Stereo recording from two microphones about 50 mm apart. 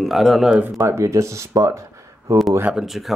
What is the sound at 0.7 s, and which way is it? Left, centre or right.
Speech, right.